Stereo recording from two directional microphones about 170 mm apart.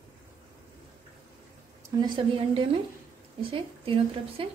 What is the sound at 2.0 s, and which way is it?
Speech, 30° right (ahead or behind).